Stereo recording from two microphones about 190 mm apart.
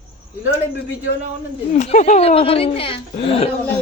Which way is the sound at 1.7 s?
40° left (ahead or behind).